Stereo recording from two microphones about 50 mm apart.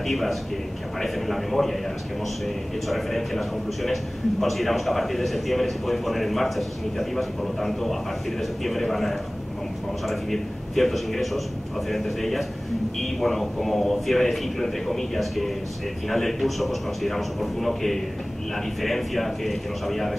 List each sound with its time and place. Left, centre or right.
0.0 s a man's voice: centre